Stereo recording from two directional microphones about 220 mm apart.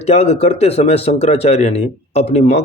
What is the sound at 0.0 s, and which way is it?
Speech, 30° left (ahead or behind).